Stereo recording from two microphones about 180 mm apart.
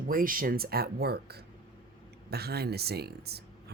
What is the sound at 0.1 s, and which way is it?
Speech, 50° right (ahead or behind).